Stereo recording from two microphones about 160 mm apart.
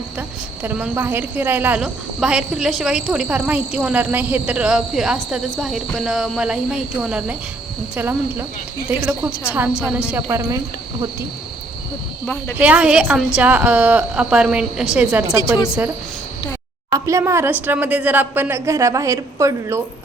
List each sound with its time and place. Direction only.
0.2 s a woman's voice: 10° right (ahead or behind)
1.8 s cricket: 5° right (ahead or behind)
7.9 s a woman's voice: 10° right (ahead or behind)
12.2 s speech: 10° left (ahead or behind)
12.5 s a woman's voice: 10° right (ahead or behind)
16.9 s a woman's voice: 20° right (ahead or behind)